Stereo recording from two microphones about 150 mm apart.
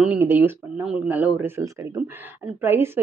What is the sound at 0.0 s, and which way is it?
Speech, 10° right (ahead or behind).